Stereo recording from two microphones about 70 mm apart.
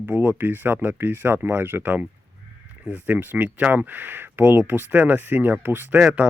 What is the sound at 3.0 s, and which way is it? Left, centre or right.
Speech, right.